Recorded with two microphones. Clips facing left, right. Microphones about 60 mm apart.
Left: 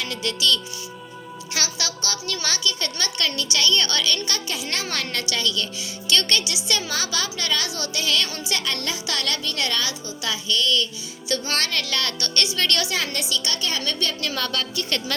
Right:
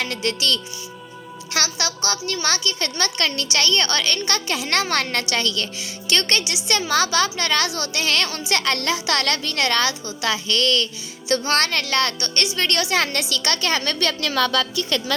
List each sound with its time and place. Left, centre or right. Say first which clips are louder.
0.0 s speech: right 2 dB; right
11.3 s a woman's voice: right 5 dB; right
12.9 s a woman's voice: right 4 dB; right